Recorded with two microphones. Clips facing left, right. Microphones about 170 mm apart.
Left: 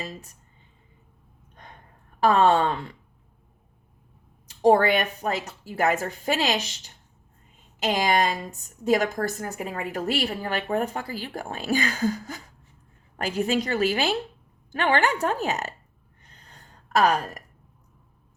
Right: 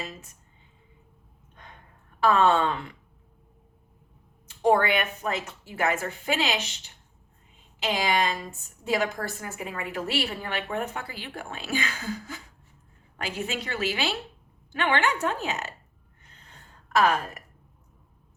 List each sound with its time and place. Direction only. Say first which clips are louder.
2.2 s a woman's voice: left 2 dB; 35° left (ahead or behind)
4.4 s a woman's voice: left 4 dB; 35° left (ahead or behind)
16.5 s a sound: left 2 dB; 40° left (ahead or behind)